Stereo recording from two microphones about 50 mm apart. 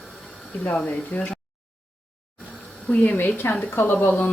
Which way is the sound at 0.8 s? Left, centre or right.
Left.